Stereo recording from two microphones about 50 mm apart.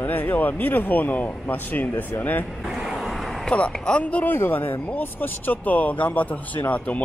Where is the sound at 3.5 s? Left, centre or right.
Left.